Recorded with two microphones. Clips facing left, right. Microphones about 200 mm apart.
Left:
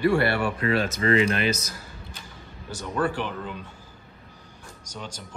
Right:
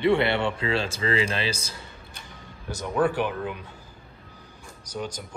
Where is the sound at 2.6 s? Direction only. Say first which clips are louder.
Right 3 dB; 10° right (ahead or behind).